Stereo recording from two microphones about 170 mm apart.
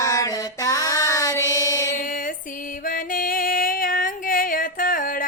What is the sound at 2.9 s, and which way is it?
Music, 55° left (ahead or behind).